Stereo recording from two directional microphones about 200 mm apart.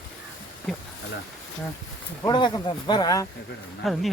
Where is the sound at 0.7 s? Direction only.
Centre (ahead or behind).